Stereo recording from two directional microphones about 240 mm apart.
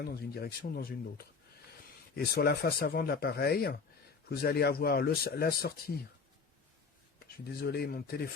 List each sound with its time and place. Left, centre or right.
0.0 s speech: left
7.4 s speech: left